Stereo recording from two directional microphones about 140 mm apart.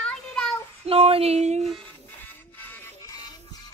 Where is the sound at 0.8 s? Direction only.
45° right (ahead or behind).